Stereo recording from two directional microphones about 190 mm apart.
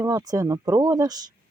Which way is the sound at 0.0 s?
20° right (ahead or behind).